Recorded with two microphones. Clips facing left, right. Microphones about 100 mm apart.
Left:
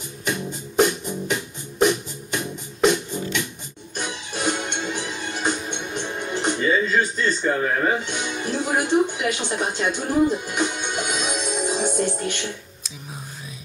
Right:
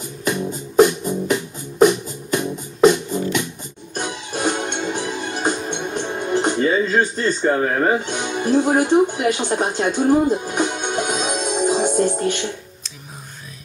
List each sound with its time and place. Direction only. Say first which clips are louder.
0.2 s music: right 5 dB; 40° right (ahead or behind)
8.0 s speech: right 5 dB; 45° right (ahead or behind)